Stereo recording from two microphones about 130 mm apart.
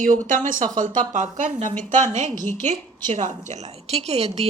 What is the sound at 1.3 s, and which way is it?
A woman's voice, 70° right (ahead or behind).